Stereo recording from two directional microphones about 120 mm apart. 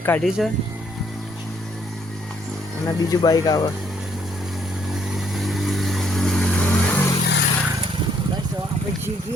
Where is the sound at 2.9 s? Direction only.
35° left (ahead or behind).